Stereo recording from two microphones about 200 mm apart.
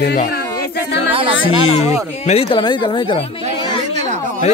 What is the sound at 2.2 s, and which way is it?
Speech, 25° left (ahead or behind).